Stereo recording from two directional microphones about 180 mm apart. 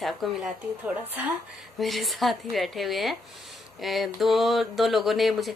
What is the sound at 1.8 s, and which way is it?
Speech, centre (ahead or behind).